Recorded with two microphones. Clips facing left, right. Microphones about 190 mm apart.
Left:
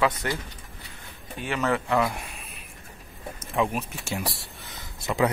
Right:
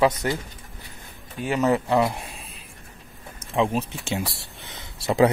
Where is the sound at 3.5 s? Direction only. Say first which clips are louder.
Right 3 dB; 25° right (ahead or behind).